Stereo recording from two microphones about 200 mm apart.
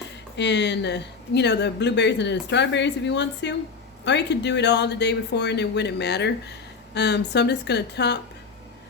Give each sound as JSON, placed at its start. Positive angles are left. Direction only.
{"t": 0.3, "sound": "speech", "side_deg": 60}